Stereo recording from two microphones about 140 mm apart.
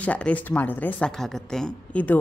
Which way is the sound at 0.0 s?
10° left (ahead or behind).